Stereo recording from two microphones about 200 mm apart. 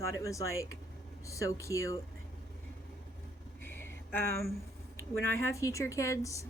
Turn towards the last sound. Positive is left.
turn(degrees=15)  # may be behind; listen again after turning